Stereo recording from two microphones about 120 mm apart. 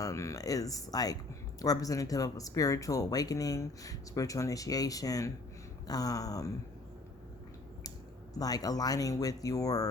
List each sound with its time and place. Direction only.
0.0 s speech: 25° left (ahead or behind)
7.9 s speech: 30° left (ahead or behind)